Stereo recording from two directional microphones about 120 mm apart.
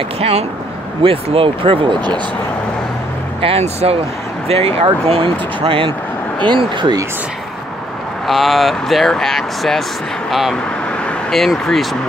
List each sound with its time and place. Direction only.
0.2 s speech: 60° right (ahead or behind); by 2.1 s 40° right (ahead or behind)
3.3 s speech: 55° right (ahead or behind); by 7.0 s 40° right (ahead or behind)
8.3 s speech: centre (ahead or behind)